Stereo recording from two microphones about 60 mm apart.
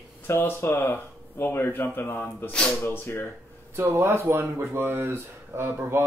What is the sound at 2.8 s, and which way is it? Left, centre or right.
Speech, left.